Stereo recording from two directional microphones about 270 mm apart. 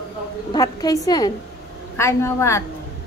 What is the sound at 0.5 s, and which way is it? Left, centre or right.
A woman's voice, centre.